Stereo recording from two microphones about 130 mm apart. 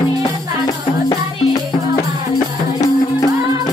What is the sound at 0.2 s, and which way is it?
Music, 35° left (ahead or behind).